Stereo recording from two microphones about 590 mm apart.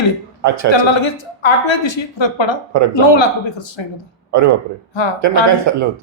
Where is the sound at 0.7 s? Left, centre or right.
Left.